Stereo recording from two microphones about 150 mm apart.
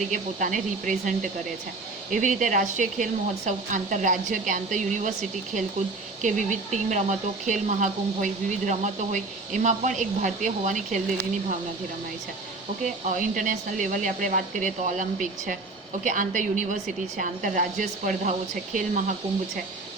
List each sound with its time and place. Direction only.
0.1 s speech: 60° right (ahead or behind)
6.2 s speech: 55° right (ahead or behind)
12.8 s speech: 60° right (ahead or behind)